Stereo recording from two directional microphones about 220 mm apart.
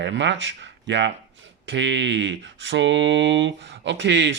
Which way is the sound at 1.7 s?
55° right (ahead or behind).